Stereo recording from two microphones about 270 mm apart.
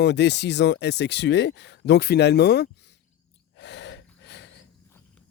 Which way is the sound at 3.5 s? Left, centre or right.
Left.